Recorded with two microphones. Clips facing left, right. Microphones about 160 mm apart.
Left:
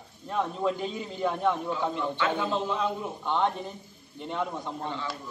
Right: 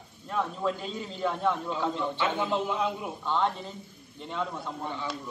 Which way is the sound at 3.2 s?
15° left (ahead or behind).